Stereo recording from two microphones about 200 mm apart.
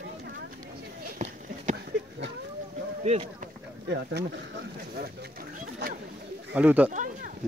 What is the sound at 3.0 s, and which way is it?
Speech, 35° right (ahead or behind).